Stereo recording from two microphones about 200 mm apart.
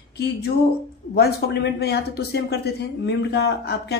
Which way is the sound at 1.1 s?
55° left (ahead or behind).